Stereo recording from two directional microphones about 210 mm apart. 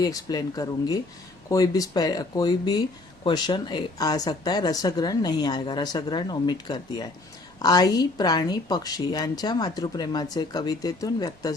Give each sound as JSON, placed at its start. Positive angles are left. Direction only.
{"t": 0.0, "sound": "a woman's voice", "side_deg": 20}